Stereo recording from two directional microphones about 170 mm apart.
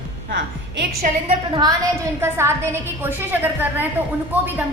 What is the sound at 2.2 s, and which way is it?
A woman's voice, 15° right (ahead or behind).